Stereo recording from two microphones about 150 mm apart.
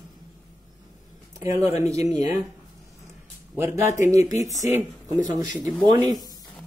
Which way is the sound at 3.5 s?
15° right (ahead or behind).